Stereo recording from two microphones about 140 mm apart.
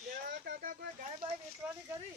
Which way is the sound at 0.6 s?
70° right (ahead or behind).